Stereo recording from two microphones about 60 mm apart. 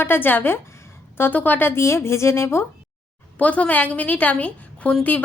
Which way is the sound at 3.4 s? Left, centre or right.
Left.